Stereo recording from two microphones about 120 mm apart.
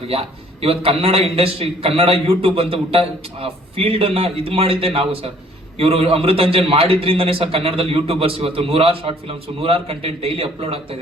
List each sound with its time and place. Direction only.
0.1 s a man's voice: 55° right (ahead or behind)